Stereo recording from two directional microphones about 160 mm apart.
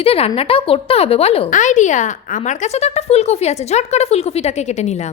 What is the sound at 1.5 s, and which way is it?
A woman's voice, 50° left (ahead or behind).